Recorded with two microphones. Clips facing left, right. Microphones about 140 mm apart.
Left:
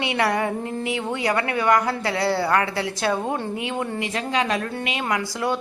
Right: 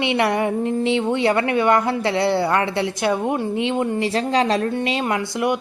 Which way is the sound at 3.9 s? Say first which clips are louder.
Right 5 dB; 35° right (ahead or behind).